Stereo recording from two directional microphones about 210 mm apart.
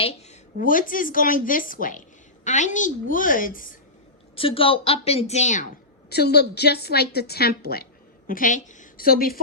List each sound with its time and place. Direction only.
0.0 s a woman's voice: 30° left (ahead or behind)
4.4 s a woman's voice: 25° left (ahead or behind)
6.1 s a woman's voice: 50° left (ahead or behind)